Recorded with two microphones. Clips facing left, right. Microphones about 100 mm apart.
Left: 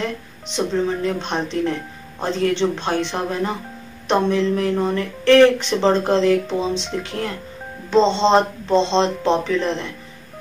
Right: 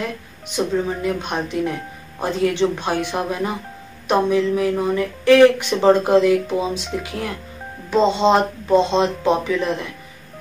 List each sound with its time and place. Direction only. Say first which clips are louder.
0.0 s speech: left 1 dB; 10° right (ahead or behind)